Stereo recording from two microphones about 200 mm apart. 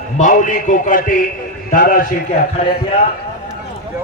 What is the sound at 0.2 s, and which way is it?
A man's voice, 40° left (ahead or behind).